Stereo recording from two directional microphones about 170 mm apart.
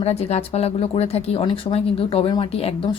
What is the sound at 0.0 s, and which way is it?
Speech, 40° left (ahead or behind).